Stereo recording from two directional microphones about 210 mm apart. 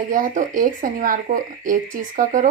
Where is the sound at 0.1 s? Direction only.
40° right (ahead or behind).